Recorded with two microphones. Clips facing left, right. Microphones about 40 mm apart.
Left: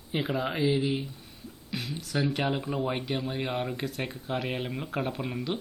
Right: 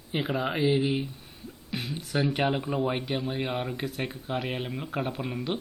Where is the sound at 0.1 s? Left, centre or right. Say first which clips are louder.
Right 1 dB; centre.